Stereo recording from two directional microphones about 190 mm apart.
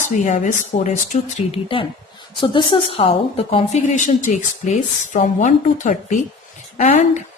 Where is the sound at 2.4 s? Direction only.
25° left (ahead or behind).